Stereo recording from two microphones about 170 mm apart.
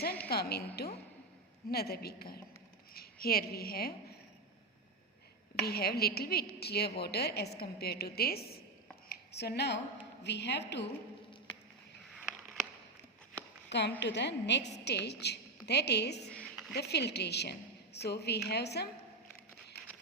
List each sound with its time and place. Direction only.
0.0 s a woman's voice: 65° left (ahead or behind)
1.7 s a woman's voice: 65° left (ahead or behind)
5.6 s a woman's voice: 65° left (ahead or behind)
9.0 s a sound: 65° left (ahead or behind); by 9.8 s 80° left
10.2 s a woman's voice: 90° left
12.0 s a sound: centre (ahead or behind)
13.7 s a woman's voice: 90° left
14.8 s a woman's voice: 80° left
16.3 s a sound: 5° left (ahead or behind)
16.7 s a woman's voice: 75° left (ahead or behind)